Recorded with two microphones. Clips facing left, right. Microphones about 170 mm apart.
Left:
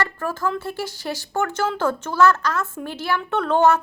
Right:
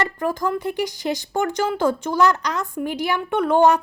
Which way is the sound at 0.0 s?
15° right (ahead or behind).